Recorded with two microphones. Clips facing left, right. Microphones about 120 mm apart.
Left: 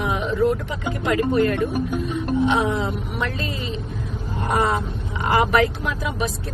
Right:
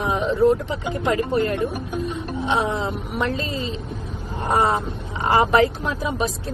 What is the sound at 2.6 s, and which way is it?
Speech, 25° right (ahead or behind).